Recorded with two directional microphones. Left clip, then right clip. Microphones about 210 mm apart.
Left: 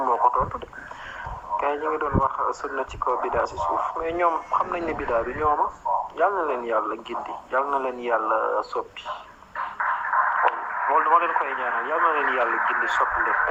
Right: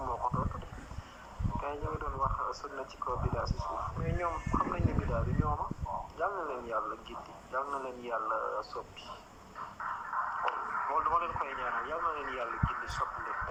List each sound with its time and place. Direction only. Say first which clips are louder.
0.0 s radio: left 14 dB; 20° left (ahead or behind)
1.5 s speech: left 14 dB; 15° left (ahead or behind)